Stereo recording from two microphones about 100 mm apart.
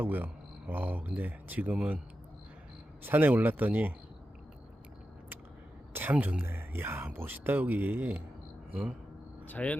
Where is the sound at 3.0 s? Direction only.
20° right (ahead or behind).